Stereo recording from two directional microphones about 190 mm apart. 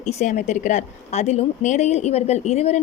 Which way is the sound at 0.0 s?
35° left (ahead or behind).